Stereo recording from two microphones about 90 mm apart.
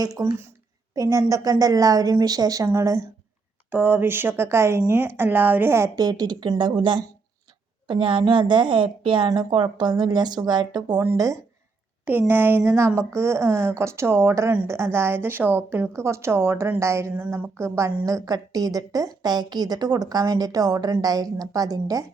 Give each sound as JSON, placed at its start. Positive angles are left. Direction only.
{"t": 0.0, "sound": "a woman's voice", "side_deg": -45}
{"t": 3.7, "sound": "a woman's voice", "side_deg": -20}
{"t": 6.0, "sound": "a woman's voice", "side_deg": -45}
{"t": 6.6, "sound": "a woman's voice", "side_deg": -65}
{"t": 12.3, "sound": "a woman's voice", "side_deg": -20}
{"t": 18.0, "sound": "a woman's voice", "side_deg": -40}